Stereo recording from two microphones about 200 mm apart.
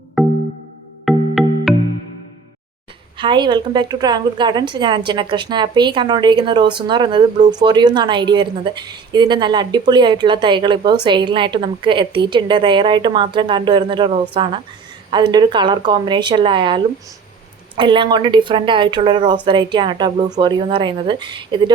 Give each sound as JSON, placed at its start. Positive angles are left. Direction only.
{"t": 0.2, "sound": "music", "side_deg": 0}
{"t": 3.2, "sound": "speech", "side_deg": -25}